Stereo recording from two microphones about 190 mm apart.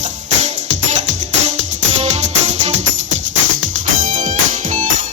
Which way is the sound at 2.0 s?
35° right (ahead or behind).